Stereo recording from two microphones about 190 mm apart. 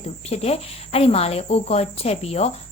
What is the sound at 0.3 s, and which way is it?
Cricket, 30° left (ahead or behind).